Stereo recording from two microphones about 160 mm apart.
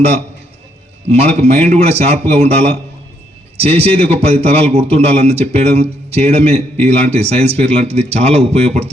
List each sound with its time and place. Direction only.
1.0 s a man's voice: 40° right (ahead or behind)